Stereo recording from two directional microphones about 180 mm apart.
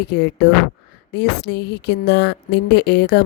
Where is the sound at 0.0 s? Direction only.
65° left (ahead or behind).